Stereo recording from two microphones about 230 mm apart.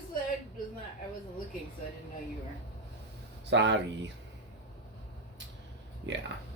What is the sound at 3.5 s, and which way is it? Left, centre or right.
Speech, right.